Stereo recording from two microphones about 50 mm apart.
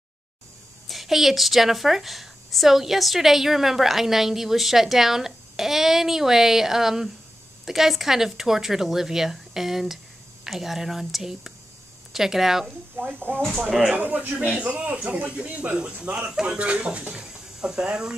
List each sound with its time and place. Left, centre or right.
0.8 s a woman's voice: centre
12.9 s speech: right
13.7 s a woman's voice: centre
13.9 s speech: right; by 16.5 s centre
16.5 s speech: right
17.2 s speech: centre